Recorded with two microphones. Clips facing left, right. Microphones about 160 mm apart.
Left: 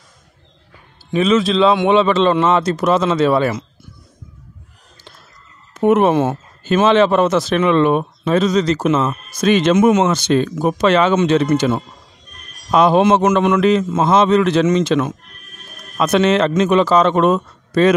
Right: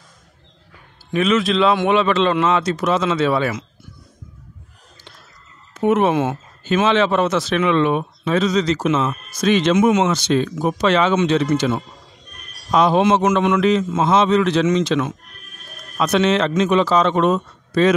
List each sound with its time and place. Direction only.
1.1 s a man's voice: 30° left (ahead or behind)
5.8 s speech: 45° left (ahead or behind)